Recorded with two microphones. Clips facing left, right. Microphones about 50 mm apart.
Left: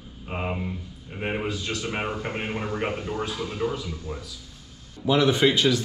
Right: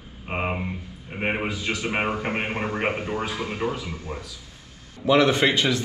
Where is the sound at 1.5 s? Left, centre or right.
Centre; by 3.7 s right.